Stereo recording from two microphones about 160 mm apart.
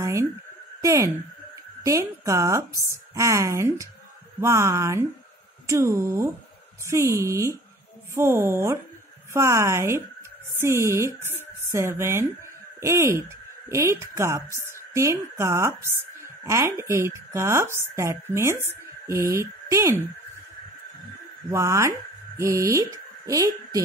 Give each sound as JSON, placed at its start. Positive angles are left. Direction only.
{"t": 0.0, "sound": "a woman's voice", "side_deg": -20}
{"t": 21.5, "sound": "a woman's voice", "side_deg": -20}